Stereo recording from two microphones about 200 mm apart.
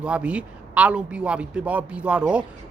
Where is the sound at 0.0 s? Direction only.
5° right (ahead or behind).